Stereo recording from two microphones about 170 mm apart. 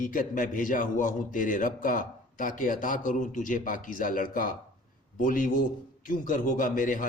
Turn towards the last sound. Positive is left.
turn(degrees=50)  # may be behind; listen again after turning